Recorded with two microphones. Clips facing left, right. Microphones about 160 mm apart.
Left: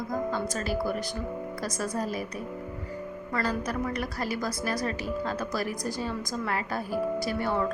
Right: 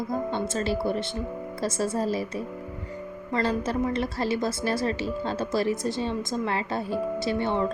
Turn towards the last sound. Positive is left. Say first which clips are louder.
# right 2 dB
turn(degrees=-25)  # may be behind; listen again after turning